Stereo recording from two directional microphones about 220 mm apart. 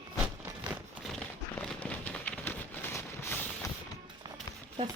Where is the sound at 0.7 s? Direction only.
Centre (ahead or behind).